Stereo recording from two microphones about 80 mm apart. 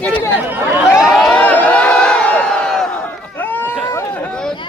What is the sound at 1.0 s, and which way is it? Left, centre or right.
Speech, centre.